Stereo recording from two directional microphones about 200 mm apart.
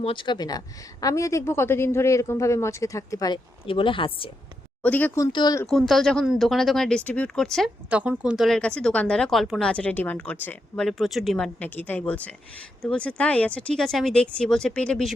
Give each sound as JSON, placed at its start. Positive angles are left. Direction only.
{"t": 0.0, "sound": "speech", "side_deg": 25}
{"t": 4.8, "sound": "speech", "side_deg": 10}
{"t": 5.6, "sound": "speech", "side_deg": 0}